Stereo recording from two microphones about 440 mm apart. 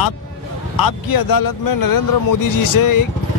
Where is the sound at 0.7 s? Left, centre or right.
Left.